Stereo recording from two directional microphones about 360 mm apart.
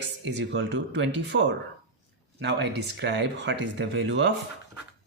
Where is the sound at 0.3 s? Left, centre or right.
Right.